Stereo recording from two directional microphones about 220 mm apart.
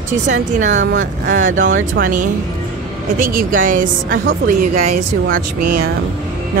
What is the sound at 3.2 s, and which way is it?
Speech, 40° right (ahead or behind).